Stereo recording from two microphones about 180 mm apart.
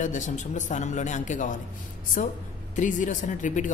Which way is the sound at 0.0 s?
45° left (ahead or behind).